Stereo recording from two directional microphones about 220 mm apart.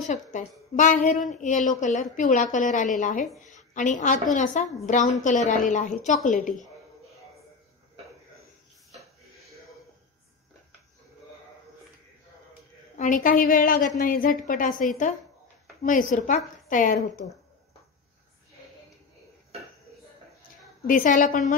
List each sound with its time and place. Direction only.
0.1 s a woman's voice: 35° left (ahead or behind)
12.9 s a woman's voice: 35° left (ahead or behind)
20.8 s a woman's voice: 40° left (ahead or behind)